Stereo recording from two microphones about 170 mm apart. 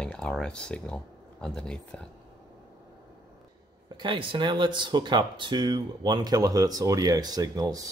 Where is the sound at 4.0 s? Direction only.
25° right (ahead or behind).